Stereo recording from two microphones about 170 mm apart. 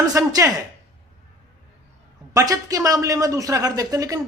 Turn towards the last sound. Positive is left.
turn(degrees=-20)  # may be behind; listen again after turning